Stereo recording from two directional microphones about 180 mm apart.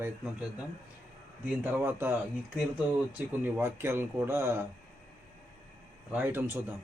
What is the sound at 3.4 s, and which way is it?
Mantra, 10° right (ahead or behind).